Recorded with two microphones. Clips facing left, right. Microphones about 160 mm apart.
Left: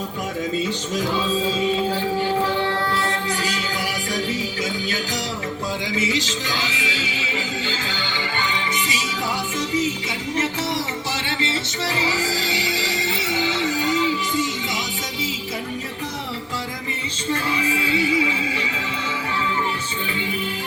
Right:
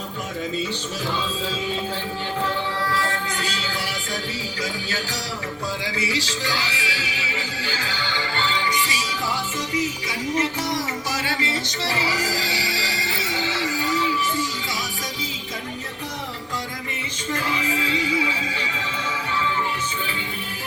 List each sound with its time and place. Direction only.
6.0 s speech: 20° left (ahead or behind)
10.3 s music: 25° left (ahead or behind)